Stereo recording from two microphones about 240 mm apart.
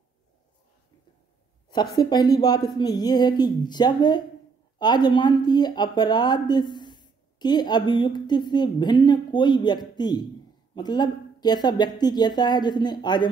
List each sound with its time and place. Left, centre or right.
1.7 s speech: centre